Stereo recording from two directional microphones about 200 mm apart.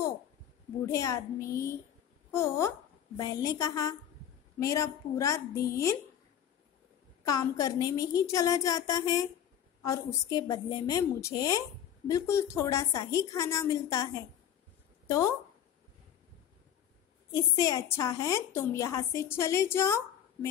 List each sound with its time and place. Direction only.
0.8 s a woman's voice: 15° left (ahead or behind)
7.2 s a woman's voice: 15° left (ahead or behind)
17.3 s a woman's voice: 15° left (ahead or behind)